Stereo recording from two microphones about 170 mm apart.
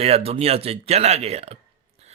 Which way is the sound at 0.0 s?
35° right (ahead or behind).